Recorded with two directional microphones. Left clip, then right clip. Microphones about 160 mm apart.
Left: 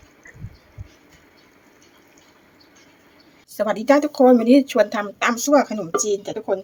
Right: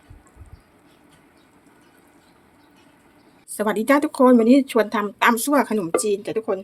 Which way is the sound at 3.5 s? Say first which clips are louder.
Left 2 dB; 30° right (ahead or behind).